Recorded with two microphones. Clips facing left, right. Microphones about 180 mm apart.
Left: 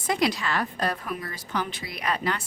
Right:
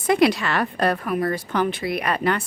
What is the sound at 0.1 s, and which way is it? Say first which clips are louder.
A woman's voice: right 7 dB; 65° right (ahead or behind).